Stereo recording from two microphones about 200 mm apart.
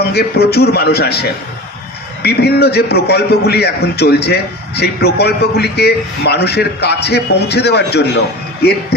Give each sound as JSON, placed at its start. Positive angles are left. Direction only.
{"t": 0.1, "sound": "a man's voice", "side_deg": 55}